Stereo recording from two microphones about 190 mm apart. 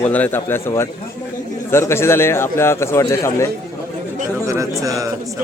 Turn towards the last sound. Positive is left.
turn(degrees=-15)  # may be behind; listen again after turning